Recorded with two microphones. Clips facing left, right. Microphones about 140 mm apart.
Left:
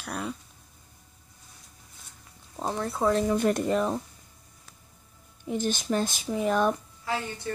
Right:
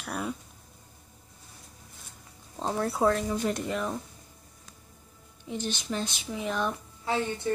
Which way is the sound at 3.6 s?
35° left (ahead or behind).